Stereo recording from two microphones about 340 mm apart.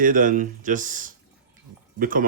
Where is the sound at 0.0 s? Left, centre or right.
Right.